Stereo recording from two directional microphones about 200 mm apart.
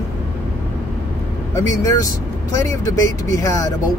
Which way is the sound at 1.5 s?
15° left (ahead or behind).